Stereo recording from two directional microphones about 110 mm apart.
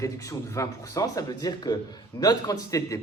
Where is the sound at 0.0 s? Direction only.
30° left (ahead or behind).